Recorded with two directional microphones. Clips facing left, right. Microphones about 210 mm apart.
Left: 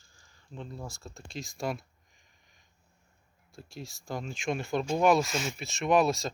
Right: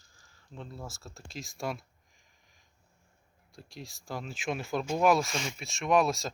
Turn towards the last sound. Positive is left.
turn(degrees=0)  # may be behind; listen again after turning